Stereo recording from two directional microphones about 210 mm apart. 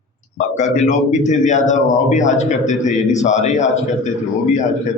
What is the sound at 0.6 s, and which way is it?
A man's voice, 35° left (ahead or behind).